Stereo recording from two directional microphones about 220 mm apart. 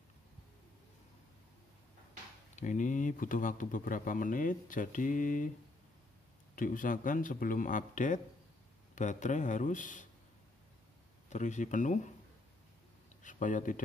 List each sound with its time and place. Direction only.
2.5 s speech: 35° left (ahead or behind)
6.5 s speech: 35° left (ahead or behind)
11.2 s speech: 35° left (ahead or behind)
13.2 s speech: 35° left (ahead or behind)